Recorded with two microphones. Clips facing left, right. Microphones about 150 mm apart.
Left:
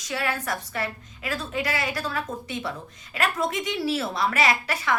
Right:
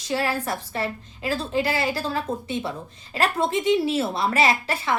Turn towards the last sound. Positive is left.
turn(degrees=-25)  # may be behind; listen again after turning